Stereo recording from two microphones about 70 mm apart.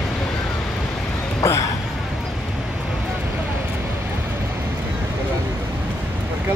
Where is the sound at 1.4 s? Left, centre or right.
Left.